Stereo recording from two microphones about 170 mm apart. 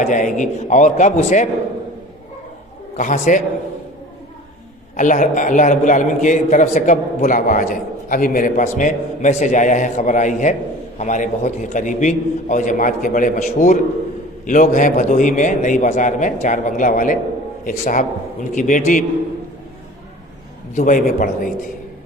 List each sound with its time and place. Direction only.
0.0 s a man's voice: 50° left (ahead or behind)
3.0 s a man's voice: 50° left (ahead or behind)
4.9 s a man's voice: 50° left (ahead or behind)
20.7 s a man's voice: 50° left (ahead or behind)